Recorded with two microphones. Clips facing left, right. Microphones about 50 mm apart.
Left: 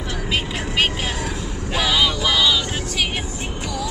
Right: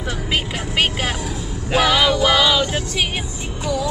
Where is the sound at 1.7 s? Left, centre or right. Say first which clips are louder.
Right 4 dB; right.